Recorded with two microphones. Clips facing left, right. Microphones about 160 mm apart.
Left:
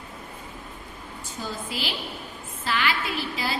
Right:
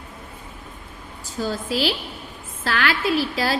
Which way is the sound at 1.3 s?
90° right.